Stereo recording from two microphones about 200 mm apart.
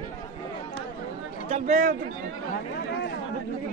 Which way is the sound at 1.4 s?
35° right (ahead or behind).